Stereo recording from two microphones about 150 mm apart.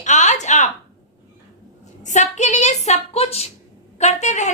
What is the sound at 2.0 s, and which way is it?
A woman's voice, 55° left (ahead or behind).